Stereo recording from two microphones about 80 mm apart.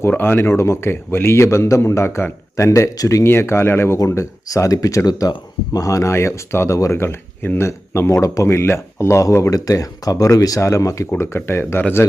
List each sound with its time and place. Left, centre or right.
0.1 s speech: left
3.2 s speech: left
11.1 s speech: left